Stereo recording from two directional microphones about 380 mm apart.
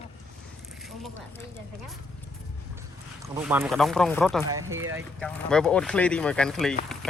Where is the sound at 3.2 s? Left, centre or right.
Centre.